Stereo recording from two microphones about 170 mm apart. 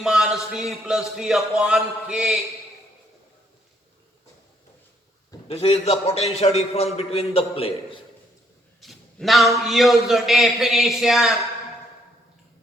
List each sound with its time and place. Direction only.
0.0 s a man's voice: 5° right (ahead or behind)
5.5 s a man's voice: 35° left (ahead or behind)
8.8 s a man's voice: centre (ahead or behind)